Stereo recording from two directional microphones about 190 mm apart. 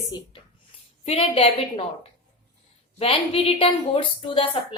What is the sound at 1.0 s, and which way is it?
A woman's voice, 30° left (ahead or behind).